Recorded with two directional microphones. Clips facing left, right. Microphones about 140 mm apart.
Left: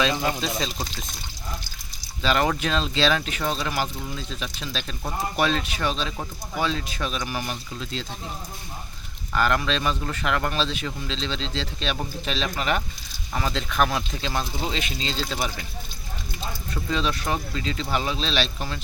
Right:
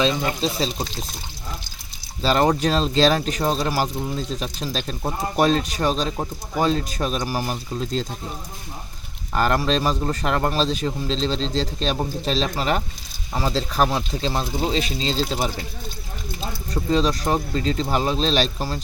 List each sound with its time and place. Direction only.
0.0 s speech: 30° right (ahead or behind)
2.2 s speech: 35° right (ahead or behind)
9.3 s speech: 40° right (ahead or behind)
16.7 s speech: 35° right (ahead or behind)